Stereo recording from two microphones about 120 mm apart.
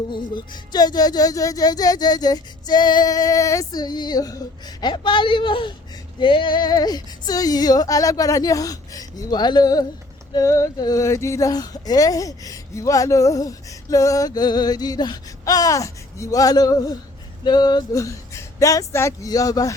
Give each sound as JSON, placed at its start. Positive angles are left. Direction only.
{"t": 0.1, "sound": "music", "side_deg": 40}
{"t": 10.3, "sound": "speech", "side_deg": 25}